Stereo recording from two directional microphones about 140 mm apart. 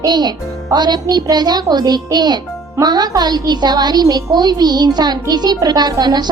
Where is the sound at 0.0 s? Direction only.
30° right (ahead or behind).